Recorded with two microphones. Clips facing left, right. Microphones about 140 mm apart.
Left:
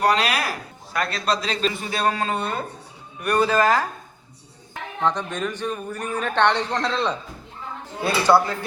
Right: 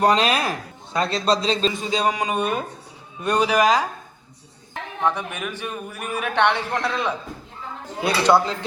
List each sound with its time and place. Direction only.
0.0 s a man's voice: 20° right (ahead or behind)
5.0 s a man's voice: 10° right (ahead or behind)